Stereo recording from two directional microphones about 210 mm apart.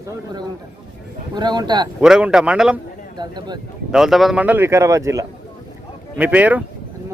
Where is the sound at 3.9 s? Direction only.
Centre (ahead or behind).